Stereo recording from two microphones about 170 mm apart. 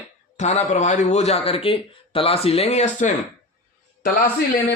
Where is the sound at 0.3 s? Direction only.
40° left (ahead or behind).